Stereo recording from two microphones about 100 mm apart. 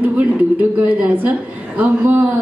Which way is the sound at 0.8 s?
15° right (ahead or behind).